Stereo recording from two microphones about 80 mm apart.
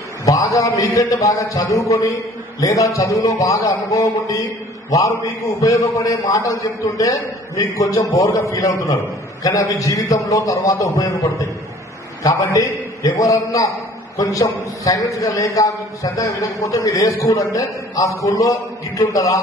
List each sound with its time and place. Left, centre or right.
0.2 s a man's voice: left
12.2 s a man's voice: left